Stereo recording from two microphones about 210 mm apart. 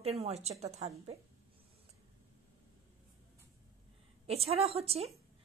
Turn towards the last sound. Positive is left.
turn(degrees=-30)  # may be behind; listen again after turning